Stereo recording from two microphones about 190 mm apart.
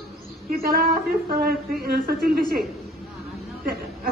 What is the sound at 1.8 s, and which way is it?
Speech, 55° right (ahead or behind).